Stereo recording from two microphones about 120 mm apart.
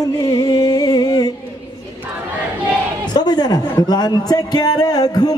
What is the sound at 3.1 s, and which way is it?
Speech, 35° left (ahead or behind).